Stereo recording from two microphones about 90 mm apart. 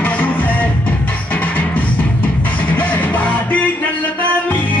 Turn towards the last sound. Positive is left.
turn(degrees=15)  # may be behind; listen again after turning